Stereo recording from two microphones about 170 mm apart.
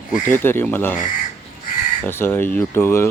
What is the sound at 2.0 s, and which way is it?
Speech, 10° left (ahead or behind).